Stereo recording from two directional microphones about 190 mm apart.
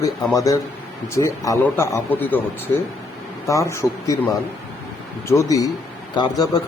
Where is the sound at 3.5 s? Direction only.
15° left (ahead or behind).